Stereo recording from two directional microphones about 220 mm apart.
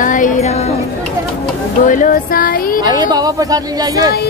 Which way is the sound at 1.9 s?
35° left (ahead or behind).